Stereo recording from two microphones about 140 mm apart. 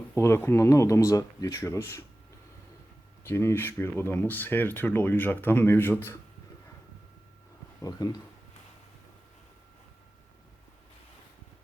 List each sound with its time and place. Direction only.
0.2 s speech: 15° left (ahead or behind)
3.2 s speech: 20° left (ahead or behind)
7.8 s speech: 25° left (ahead or behind)